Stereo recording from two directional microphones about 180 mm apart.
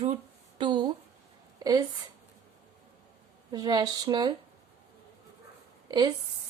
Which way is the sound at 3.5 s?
20° right (ahead or behind).